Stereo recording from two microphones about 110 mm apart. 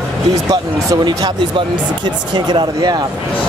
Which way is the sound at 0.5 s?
40° right (ahead or behind).